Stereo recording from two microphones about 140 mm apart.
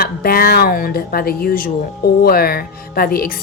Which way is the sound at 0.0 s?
90° left.